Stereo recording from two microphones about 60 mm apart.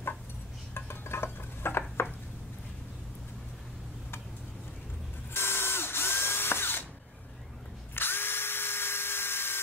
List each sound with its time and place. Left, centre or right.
0.7 s dishes: left
5.3 s drill: left
7.9 s drill: left